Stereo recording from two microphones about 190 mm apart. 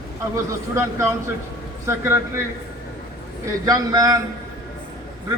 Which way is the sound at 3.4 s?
20° right (ahead or behind).